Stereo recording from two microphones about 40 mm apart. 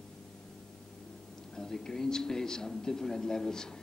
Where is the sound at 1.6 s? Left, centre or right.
Centre.